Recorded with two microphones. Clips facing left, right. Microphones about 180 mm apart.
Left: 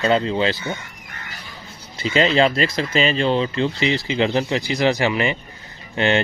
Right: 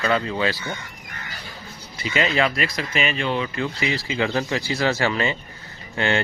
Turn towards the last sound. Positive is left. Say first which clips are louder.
# left 4 dB
turn(degrees=20)  # may be behind; listen again after turning